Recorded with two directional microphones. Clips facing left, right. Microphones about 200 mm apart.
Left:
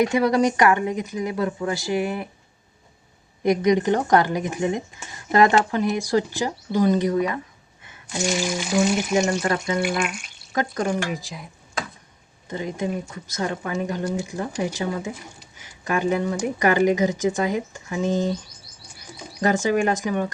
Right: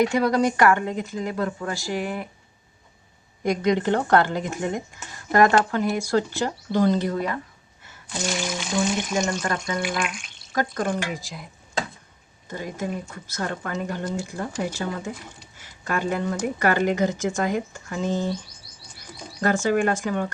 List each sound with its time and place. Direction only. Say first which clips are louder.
0.3 s speech: even; 20° left (ahead or behind)
3.4 s speech: left 3 dB; 15° left (ahead or behind)
12.5 s speech: left 3 dB; 20° left (ahead or behind)
19.4 s speech: left 1 dB; 15° left (ahead or behind)